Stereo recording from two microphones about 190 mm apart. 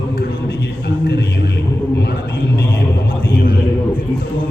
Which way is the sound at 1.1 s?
55° left (ahead or behind).